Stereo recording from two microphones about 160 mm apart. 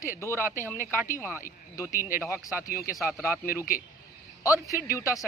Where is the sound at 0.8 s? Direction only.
15° right (ahead or behind).